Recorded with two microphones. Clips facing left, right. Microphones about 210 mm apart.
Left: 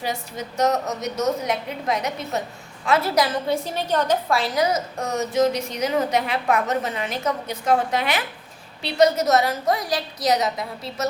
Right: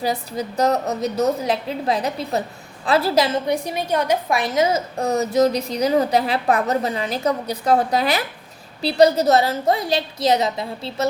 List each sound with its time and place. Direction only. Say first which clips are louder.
0.0 s a woman's voice: right 5 dB; 35° right (ahead or behind)